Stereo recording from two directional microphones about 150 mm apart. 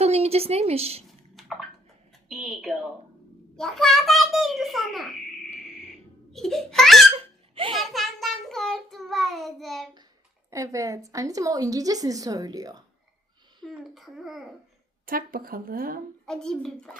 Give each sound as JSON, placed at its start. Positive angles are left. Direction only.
{"t": 0.0, "sound": "a woman's voice", "side_deg": -45}
{"t": 1.4, "sound": "a sound", "side_deg": 0}
{"t": 2.3, "sound": "child singing", "side_deg": 0}
{"t": 6.3, "sound": "child singing", "side_deg": 0}
{"t": 7.2, "sound": "hiccup", "side_deg": -35}
{"t": 7.8, "sound": "child singing", "side_deg": 0}
{"t": 10.5, "sound": "a woman's voice", "side_deg": -20}
{"t": 13.6, "sound": "child singing", "side_deg": 0}
{"t": 15.0, "sound": "speech", "side_deg": -75}
{"t": 16.2, "sound": "child singing", "side_deg": 5}